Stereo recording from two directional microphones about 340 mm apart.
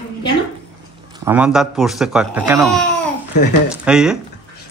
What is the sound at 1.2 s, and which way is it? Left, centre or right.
Speech, centre.